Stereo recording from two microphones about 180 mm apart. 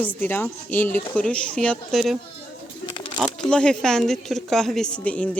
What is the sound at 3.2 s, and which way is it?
Speech, 5° left (ahead or behind).